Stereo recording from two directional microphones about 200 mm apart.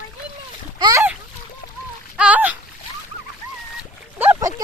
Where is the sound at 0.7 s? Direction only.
20° right (ahead or behind).